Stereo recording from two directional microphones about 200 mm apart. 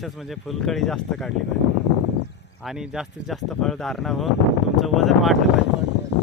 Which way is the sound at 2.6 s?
Centre (ahead or behind).